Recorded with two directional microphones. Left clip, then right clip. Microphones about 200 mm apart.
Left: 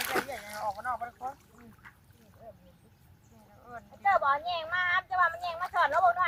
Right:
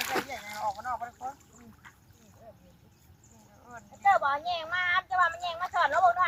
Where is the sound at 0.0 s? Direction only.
5° left (ahead or behind).